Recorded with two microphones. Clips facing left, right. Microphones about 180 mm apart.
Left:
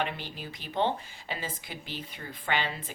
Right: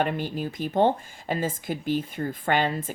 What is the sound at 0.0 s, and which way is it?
Speech, 45° right (ahead or behind).